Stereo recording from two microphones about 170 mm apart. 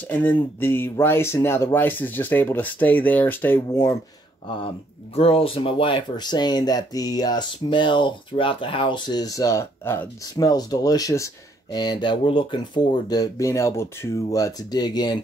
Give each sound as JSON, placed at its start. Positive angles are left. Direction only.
{"t": 0.1, "sound": "speech", "side_deg": 10}
{"t": 4.6, "sound": "speech", "side_deg": 35}